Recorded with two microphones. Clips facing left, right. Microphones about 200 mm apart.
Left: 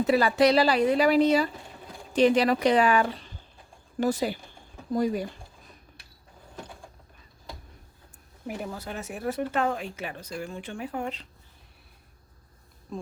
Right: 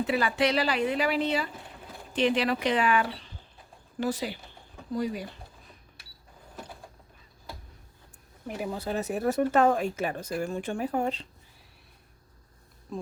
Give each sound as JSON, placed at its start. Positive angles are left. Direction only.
{"t": 0.0, "sound": "a woman's voice", "side_deg": 40}
{"t": 8.7, "sound": "speech", "side_deg": -30}
{"t": 12.9, "sound": "speech", "side_deg": 0}